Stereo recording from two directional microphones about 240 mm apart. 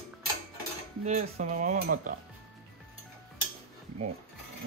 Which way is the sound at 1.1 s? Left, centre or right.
Right.